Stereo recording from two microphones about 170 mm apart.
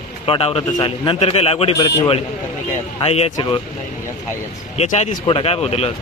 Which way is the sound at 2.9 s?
35° left (ahead or behind).